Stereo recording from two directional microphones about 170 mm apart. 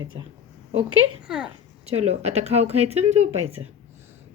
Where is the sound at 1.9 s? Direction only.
40° right (ahead or behind).